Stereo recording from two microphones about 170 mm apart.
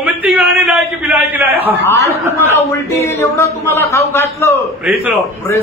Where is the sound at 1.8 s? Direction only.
15° left (ahead or behind).